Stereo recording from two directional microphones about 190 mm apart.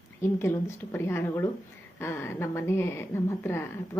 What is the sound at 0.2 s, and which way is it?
A woman's voice, 15° left (ahead or behind).